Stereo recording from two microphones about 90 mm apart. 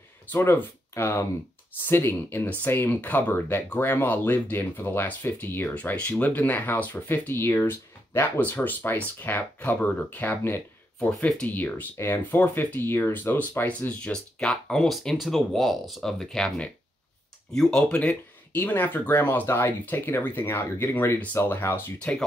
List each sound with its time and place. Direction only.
0.3 s speech: 25° left (ahead or behind)
11.0 s speech: 10° left (ahead or behind)
21.9 s speech: 10° left (ahead or behind)